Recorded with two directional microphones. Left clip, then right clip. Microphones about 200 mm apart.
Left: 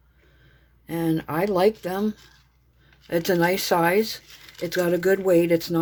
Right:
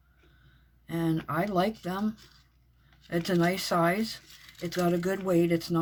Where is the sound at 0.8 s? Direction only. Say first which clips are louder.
Left 5 dB; 40° left (ahead or behind).